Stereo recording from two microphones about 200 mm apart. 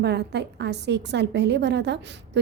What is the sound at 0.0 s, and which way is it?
A woman's voice, 55° right (ahead or behind).